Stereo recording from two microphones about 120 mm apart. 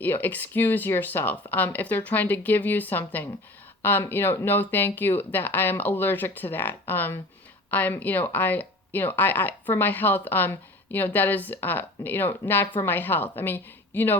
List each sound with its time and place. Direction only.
0.0 s speech: 15° left (ahead or behind)